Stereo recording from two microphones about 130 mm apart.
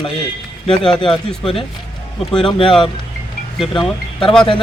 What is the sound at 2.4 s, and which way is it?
Speech, 40° left (ahead or behind).